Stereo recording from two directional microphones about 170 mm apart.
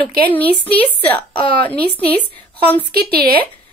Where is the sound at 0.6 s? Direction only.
10° left (ahead or behind).